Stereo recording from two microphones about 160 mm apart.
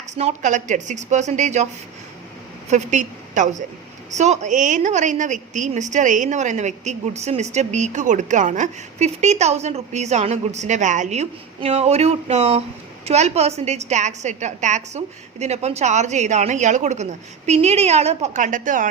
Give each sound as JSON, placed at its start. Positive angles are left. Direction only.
{"t": 0.1, "sound": "a woman's voice", "side_deg": -45}
{"t": 2.6, "sound": "a woman's voice", "side_deg": -50}